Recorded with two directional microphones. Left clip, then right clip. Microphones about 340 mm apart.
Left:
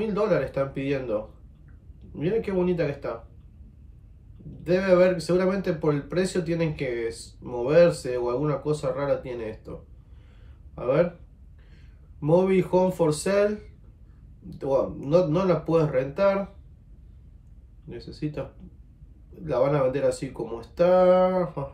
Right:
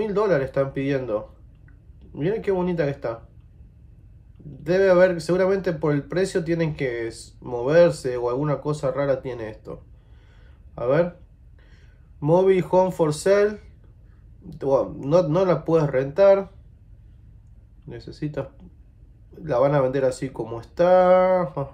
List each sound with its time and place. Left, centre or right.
0.0 s speech: centre
2.1 s speech: centre
4.6 s speech: centre
10.8 s speech: centre
12.3 s speech: centre
17.8 s speech: centre
19.4 s speech: centre